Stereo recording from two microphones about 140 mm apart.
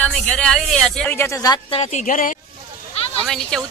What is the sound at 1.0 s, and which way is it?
Speech, 15° left (ahead or behind).